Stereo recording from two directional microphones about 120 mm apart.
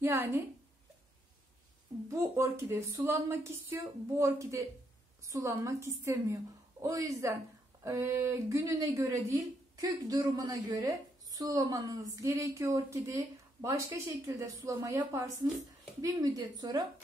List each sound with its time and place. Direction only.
0.0 s a woman's voice: 15° right (ahead or behind)
2.0 s a woman's voice: 25° right (ahead or behind)